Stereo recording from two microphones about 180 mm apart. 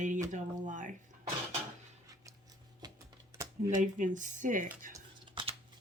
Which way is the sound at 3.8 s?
45° right (ahead or behind).